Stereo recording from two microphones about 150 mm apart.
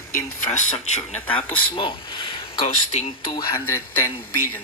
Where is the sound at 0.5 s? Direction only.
50° left (ahead or behind).